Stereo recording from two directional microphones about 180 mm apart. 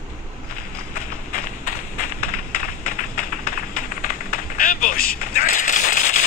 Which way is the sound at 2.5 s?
50° left (ahead or behind).